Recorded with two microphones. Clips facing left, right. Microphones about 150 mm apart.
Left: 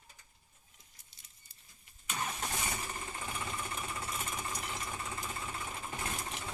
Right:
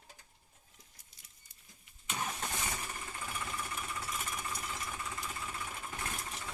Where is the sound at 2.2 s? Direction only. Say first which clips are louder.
Left 1 dB; centre (ahead or behind).